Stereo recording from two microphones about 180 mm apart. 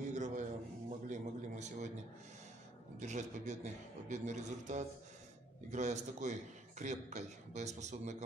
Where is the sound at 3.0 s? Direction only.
40° right (ahead or behind).